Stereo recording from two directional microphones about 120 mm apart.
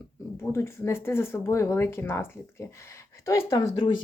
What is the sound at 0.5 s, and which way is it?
Speech, 20° left (ahead or behind).